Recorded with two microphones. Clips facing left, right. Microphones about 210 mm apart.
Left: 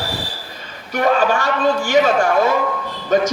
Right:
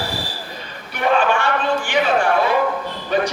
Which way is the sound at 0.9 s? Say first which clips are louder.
Left 2 dB; 40° left (ahead or behind).